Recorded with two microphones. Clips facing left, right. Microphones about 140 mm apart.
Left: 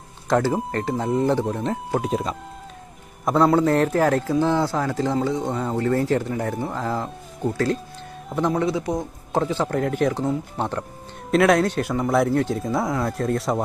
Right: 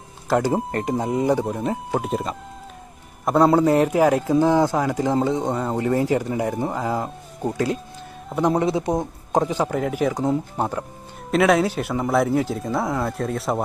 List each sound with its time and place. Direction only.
0.3 s a man's voice: 10° right (ahead or behind)